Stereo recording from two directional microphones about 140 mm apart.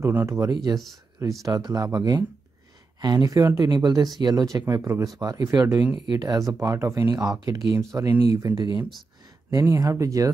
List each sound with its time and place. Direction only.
0.0 s speech: 15° right (ahead or behind)